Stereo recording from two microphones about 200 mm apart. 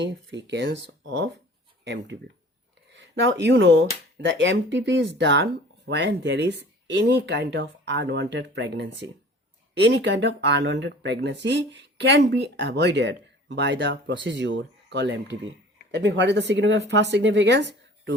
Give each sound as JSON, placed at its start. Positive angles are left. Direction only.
{"t": 0.0, "sound": "speech", "side_deg": -60}